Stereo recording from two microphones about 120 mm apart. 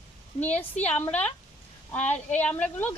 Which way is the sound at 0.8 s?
15° left (ahead or behind).